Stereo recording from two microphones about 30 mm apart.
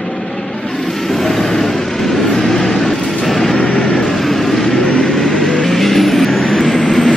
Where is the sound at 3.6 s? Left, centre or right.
Left.